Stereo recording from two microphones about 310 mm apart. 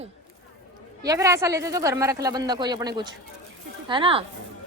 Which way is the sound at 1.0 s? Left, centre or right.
Centre.